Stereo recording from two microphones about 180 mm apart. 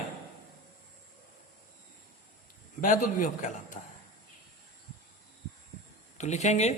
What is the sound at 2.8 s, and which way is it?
A man's voice, 45° left (ahead or behind).